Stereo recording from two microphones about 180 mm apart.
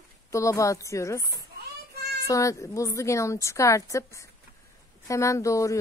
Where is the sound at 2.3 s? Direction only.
15° left (ahead or behind).